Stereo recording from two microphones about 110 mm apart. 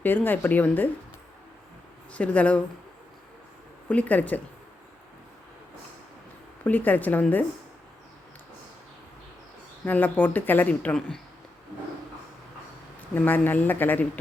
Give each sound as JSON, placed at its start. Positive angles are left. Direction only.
{"t": 0.0, "sound": "speech", "side_deg": 15}
{"t": 2.1, "sound": "speech", "side_deg": 10}
{"t": 3.8, "sound": "speech", "side_deg": 15}
{"t": 6.7, "sound": "speech", "side_deg": 15}
{"t": 9.8, "sound": "speech", "side_deg": 15}
{"t": 13.1, "sound": "speech", "side_deg": 15}